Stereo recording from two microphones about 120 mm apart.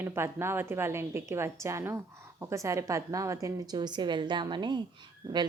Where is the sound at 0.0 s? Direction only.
20° right (ahead or behind).